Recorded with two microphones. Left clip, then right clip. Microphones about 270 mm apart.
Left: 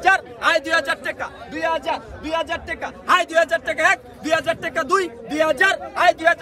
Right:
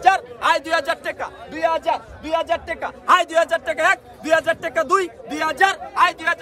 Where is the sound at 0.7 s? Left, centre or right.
Right.